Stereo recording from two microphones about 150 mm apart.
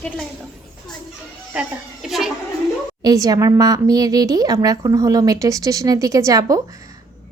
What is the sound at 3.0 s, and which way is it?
Speech, 25° right (ahead or behind).